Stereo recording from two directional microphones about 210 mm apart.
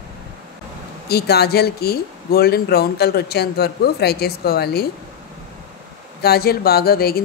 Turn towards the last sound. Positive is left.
turn(degrees=45)  # may be behind; listen again after turning